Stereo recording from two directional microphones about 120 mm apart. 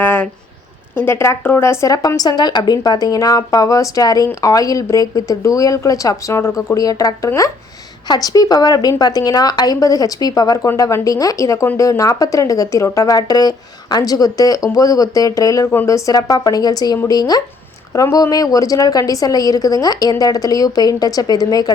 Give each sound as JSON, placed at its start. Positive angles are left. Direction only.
{"t": 0.0, "sound": "a woman's voice", "side_deg": 15}